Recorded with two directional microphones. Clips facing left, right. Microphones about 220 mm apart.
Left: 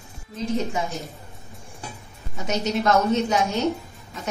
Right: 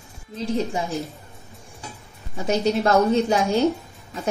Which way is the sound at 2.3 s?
30° right (ahead or behind).